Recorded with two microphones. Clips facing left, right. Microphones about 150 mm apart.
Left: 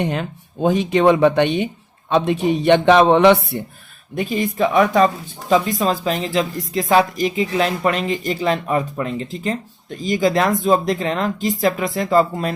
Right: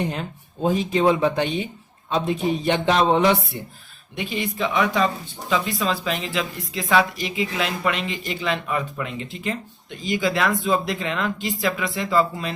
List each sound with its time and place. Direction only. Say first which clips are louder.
0.0 s speech: left 4 dB; 70° left (ahead or behind)
4.1 s speech: left 6 dB; 45° left (ahead or behind)